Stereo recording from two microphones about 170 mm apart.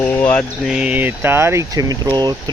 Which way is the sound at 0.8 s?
10° right (ahead or behind).